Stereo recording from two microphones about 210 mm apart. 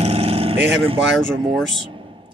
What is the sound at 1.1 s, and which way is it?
Speech, centre (ahead or behind).